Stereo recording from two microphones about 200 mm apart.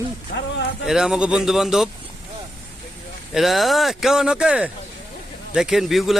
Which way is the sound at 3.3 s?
Centre (ahead or behind).